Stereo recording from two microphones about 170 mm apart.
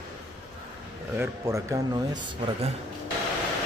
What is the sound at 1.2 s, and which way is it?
A man's voice, 15° right (ahead or behind).